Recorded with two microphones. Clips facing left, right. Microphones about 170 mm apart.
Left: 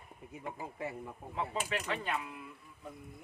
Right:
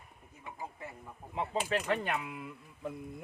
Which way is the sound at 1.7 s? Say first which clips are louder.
Right 4 dB; 55° right (ahead or behind).